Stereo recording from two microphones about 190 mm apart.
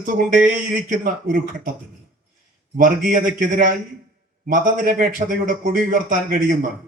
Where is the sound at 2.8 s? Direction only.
45° right (ahead or behind).